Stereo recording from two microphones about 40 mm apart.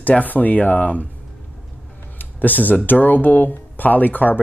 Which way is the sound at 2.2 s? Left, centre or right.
Left.